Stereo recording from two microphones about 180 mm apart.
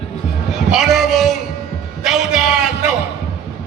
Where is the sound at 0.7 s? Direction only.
Centre (ahead or behind).